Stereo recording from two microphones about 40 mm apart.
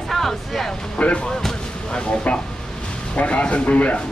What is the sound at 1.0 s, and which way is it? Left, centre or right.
Speech, left.